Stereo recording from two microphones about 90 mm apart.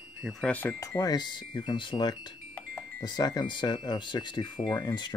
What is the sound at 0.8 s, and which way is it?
Speech, 40° left (ahead or behind).